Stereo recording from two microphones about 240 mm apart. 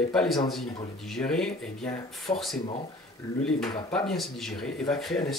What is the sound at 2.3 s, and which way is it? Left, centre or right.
Speech, centre.